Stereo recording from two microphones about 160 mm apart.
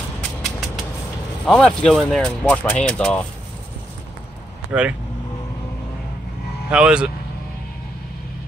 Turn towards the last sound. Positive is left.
turn(degrees=-5)  # may be behind; listen again after turning